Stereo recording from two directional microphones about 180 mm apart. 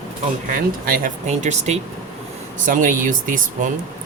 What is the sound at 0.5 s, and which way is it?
Speech, 50° right (ahead or behind).